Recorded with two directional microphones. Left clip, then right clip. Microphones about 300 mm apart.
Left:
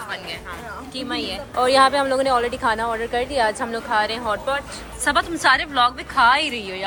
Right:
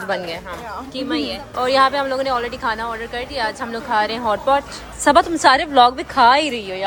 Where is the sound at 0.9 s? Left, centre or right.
Centre.